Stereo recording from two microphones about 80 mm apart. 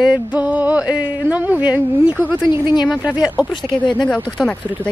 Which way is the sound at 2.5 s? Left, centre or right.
Left.